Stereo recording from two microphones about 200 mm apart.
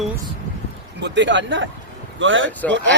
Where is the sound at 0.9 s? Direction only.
60° right (ahead or behind).